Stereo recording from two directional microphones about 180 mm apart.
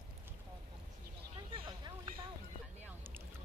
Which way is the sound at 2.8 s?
10° right (ahead or behind).